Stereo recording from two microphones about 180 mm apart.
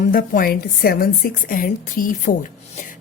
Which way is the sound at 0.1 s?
55° left (ahead or behind).